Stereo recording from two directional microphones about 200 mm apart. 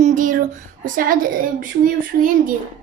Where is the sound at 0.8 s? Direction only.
45° right (ahead or behind).